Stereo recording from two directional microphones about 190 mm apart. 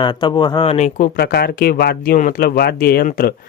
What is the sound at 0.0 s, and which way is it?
Speech, 25° left (ahead or behind).